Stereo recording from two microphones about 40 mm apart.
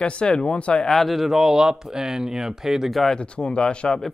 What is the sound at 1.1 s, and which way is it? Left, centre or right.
Speech, centre.